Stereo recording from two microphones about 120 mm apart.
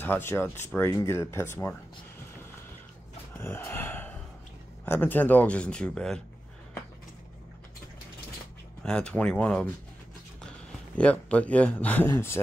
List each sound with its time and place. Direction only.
0.0 s speech: 20° left (ahead or behind)
3.3 s gasp: 20° left (ahead or behind)
4.8 s speech: 15° left (ahead or behind)
8.8 s speech: 10° left (ahead or behind)
11.0 s speech: 10° left (ahead or behind)